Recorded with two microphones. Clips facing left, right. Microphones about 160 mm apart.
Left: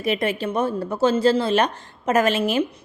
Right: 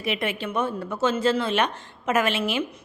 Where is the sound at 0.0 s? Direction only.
40° left (ahead or behind).